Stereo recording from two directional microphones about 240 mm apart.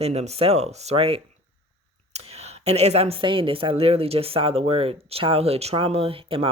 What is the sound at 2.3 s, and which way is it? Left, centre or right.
A woman's voice, right.